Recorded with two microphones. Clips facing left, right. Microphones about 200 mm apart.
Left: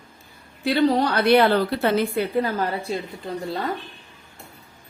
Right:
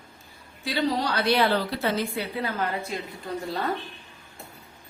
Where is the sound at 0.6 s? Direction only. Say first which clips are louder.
Left 7 dB; 55° left (ahead or behind); by 2.9 s 35° left (ahead or behind).